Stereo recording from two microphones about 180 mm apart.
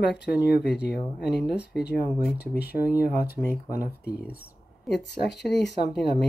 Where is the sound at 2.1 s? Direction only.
Centre (ahead or behind).